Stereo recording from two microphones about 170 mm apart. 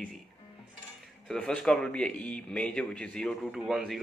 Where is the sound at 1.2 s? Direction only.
5° left (ahead or behind).